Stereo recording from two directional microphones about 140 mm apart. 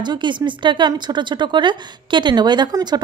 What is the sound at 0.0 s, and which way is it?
Speech, 35° right (ahead or behind).